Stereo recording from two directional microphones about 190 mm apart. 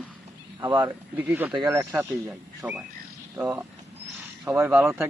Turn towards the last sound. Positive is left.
turn(degrees=-10)  # may be behind; listen again after turning